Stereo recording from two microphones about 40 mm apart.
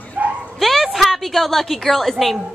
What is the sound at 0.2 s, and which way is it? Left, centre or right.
Bow-wow, right.